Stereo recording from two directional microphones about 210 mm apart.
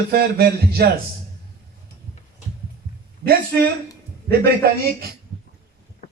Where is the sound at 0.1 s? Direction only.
50° right (ahead or behind).